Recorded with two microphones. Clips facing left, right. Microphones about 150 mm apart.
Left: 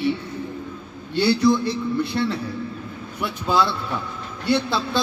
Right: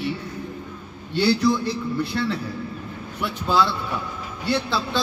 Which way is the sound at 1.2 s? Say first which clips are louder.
Left 2 dB; centre (ahead or behind).